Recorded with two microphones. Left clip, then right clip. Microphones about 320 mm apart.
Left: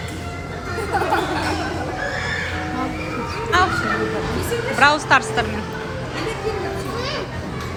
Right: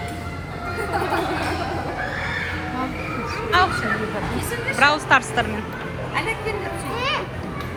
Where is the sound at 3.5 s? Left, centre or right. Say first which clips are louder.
Left 1 dB; centre.